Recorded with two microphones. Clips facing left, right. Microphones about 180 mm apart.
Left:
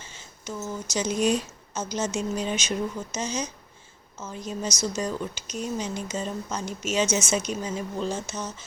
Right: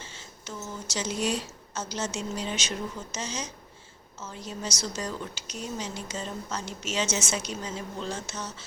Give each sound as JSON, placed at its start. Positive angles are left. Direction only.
{"t": 0.2, "sound": "speech", "side_deg": 15}
{"t": 4.8, "sound": "speech", "side_deg": 20}